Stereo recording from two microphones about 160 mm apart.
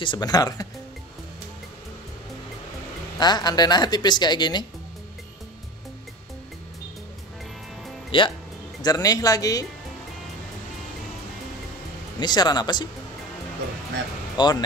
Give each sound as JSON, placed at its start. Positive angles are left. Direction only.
{"t": 0.0, "sound": "a woman's voice", "side_deg": 25}
{"t": 3.2, "sound": "a woman's voice", "side_deg": 25}
{"t": 8.1, "sound": "speech", "side_deg": 35}
{"t": 8.8, "sound": "a woman's voice", "side_deg": 25}
{"t": 12.2, "sound": "a woman's voice", "side_deg": 25}
{"t": 14.3, "sound": "speech", "side_deg": 30}